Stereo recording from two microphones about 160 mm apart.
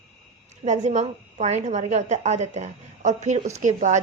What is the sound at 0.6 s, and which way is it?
A woman's voice, 45° right (ahead or behind).